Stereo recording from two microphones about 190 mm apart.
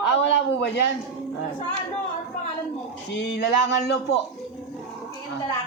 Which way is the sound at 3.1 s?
65° left (ahead or behind).